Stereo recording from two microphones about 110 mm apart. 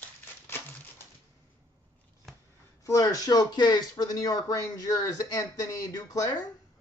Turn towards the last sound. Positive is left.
turn(degrees=35)  # may be behind; listen again after turning